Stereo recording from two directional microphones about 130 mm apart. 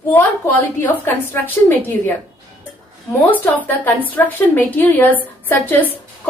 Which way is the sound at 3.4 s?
15° left (ahead or behind).